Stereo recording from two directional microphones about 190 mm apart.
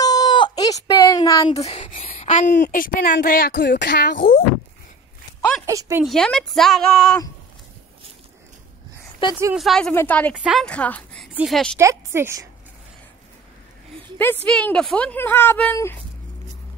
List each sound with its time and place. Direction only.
0.0 s a sound: 20° left (ahead or behind)
1.5 s speech: 35° left (ahead or behind)
2.6 s a child's voice: 45° left (ahead or behind)
5.7 s a woman's voice: 15° right (ahead or behind)
6.0 s a woman's voice: 5° left (ahead or behind)
9.3 s a woman's voice: 15° right (ahead or behind)
9.6 s a woman's voice: centre (ahead or behind)
10.3 s a woman's voice: 5° right (ahead or behind)
11.7 s a woman's voice: 15° right (ahead or behind)
14.1 s speech: 10° left (ahead or behind)